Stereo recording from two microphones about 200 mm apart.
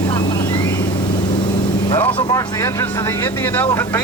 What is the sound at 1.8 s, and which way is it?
Speech, 25° left (ahead or behind).